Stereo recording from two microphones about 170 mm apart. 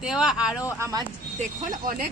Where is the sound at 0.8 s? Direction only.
20° right (ahead or behind).